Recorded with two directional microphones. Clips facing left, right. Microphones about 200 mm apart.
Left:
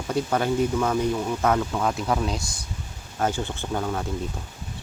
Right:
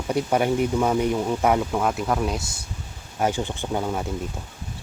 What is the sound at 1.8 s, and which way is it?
Speech, 5° right (ahead or behind).